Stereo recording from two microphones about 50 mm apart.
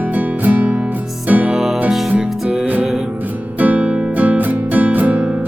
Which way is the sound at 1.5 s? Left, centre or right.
Centre.